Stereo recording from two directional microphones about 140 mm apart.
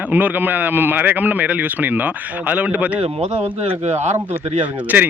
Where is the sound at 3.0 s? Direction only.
50° right (ahead or behind).